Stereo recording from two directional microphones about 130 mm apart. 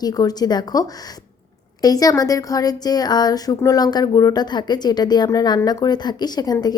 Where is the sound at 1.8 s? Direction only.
30° left (ahead or behind).